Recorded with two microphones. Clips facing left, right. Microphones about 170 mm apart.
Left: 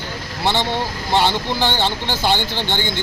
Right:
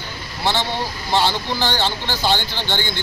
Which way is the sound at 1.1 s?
20° left (ahead or behind).